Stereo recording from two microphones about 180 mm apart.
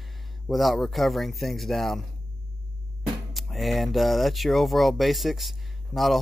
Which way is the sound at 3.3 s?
Centre (ahead or behind).